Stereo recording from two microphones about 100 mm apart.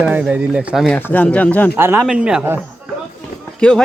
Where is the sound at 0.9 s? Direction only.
20° left (ahead or behind).